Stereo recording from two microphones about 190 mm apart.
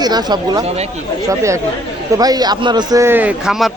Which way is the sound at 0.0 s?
20° right (ahead or behind).